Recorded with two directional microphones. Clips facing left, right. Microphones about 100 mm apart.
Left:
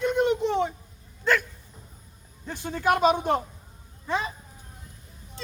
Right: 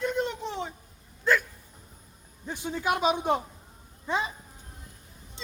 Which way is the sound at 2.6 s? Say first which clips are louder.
Left 4 dB; 50° left (ahead or behind).